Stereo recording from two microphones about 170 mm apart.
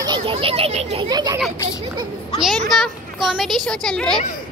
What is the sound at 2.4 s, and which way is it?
Speech, centre (ahead or behind).